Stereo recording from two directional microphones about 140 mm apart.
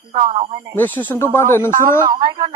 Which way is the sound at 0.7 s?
15° left (ahead or behind).